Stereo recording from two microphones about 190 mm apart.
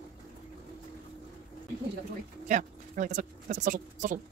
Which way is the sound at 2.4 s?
40° right (ahead or behind).